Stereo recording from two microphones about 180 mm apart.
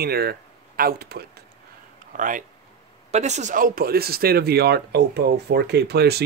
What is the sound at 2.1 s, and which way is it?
Speech, 50° right (ahead or behind).